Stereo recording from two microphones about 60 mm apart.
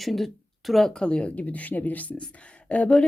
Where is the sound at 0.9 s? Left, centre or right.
Centre.